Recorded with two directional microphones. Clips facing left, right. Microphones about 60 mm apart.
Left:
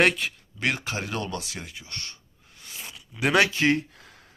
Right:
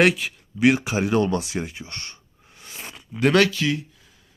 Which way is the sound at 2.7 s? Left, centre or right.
Right.